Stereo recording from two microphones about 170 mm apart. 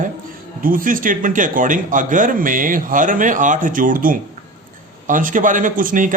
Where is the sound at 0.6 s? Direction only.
55° right (ahead or behind).